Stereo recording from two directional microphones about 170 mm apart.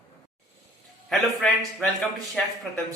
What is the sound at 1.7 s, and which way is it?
Speech, centre (ahead or behind).